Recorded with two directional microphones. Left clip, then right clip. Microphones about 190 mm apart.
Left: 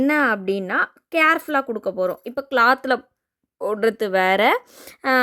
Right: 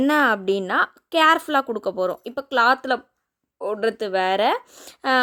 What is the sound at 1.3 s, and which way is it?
Speech, 10° left (ahead or behind).